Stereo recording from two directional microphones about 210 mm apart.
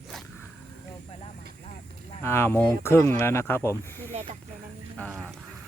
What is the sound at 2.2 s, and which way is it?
Speech, 10° left (ahead or behind).